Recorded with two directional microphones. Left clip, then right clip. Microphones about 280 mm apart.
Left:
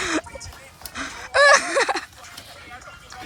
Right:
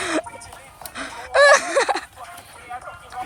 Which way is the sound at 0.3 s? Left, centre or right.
Centre.